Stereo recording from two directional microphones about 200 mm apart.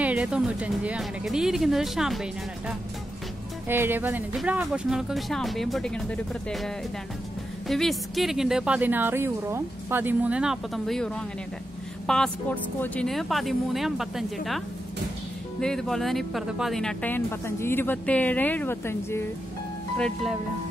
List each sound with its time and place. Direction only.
0.0 s a woman's voice: 5° right (ahead or behind)
3.6 s a woman's voice: 10° right (ahead or behind)
15.6 s speech: 5° left (ahead or behind)